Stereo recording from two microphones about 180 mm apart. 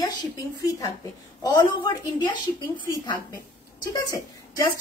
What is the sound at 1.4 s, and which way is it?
Speech, 25° left (ahead or behind).